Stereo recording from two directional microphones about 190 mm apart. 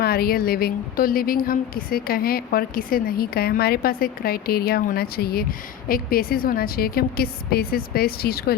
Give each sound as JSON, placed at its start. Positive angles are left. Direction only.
{"t": 0.0, "sound": "a woman's voice", "side_deg": 55}